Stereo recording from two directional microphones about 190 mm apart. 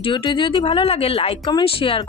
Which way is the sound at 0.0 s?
25° left (ahead or behind).